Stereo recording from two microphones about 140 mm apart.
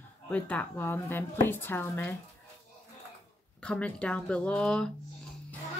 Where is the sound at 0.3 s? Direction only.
10° left (ahead or behind).